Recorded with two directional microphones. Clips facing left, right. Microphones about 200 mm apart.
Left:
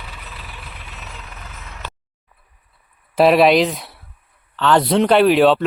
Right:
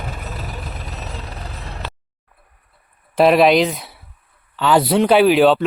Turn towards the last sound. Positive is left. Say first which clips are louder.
# even
turn(degrees=0)  # may be behind; listen again after turning